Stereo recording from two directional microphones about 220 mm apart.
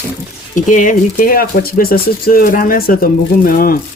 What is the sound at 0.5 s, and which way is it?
Speech, 35° left (ahead or behind).